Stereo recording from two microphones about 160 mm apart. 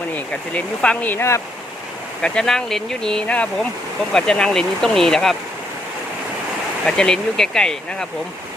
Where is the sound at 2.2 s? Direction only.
5° left (ahead or behind).